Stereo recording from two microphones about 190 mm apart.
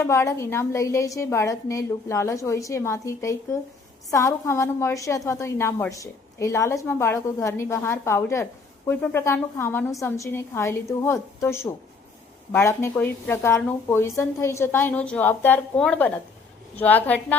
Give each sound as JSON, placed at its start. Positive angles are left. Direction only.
{"t": 0.0, "sound": "a woman's voice", "side_deg": 15}